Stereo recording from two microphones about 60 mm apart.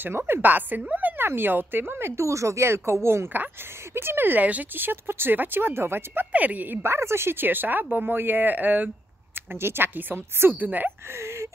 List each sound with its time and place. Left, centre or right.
0.3 s a woman's voice: right
6.3 s a woman's voice: right
11.1 s a sound: right